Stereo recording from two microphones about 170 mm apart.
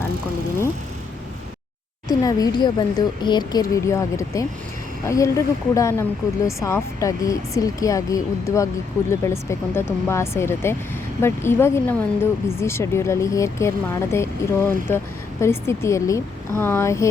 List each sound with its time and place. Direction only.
2.0 s speech: 20° left (ahead or behind)